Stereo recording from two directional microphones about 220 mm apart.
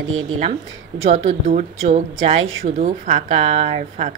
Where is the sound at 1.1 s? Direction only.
30° right (ahead or behind).